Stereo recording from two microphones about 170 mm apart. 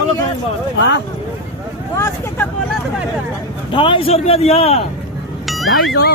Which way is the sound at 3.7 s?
30° left (ahead or behind).